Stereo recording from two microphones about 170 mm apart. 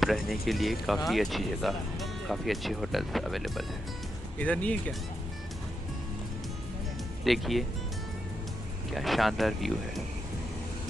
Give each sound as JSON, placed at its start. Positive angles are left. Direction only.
{"t": 0.0, "sound": "speech", "side_deg": 0}
{"t": 7.2, "sound": "speech", "side_deg": 0}
{"t": 8.9, "sound": "speech", "side_deg": 0}